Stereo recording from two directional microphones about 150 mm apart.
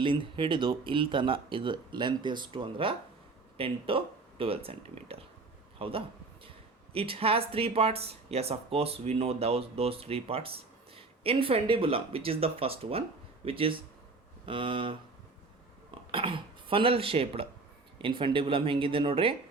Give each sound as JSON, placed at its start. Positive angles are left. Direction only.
{"t": 0.0, "sound": "speech", "side_deg": -35}
{"t": 16.1, "sound": "speech", "side_deg": -35}